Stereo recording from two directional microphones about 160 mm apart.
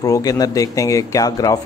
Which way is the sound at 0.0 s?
20° left (ahead or behind).